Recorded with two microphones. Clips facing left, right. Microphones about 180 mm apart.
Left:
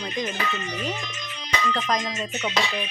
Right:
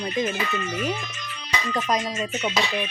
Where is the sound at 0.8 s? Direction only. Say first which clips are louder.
Right 3 dB; 15° left (ahead or behind).